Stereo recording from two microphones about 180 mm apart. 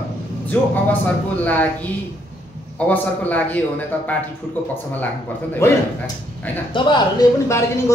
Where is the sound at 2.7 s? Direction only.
10° left (ahead or behind).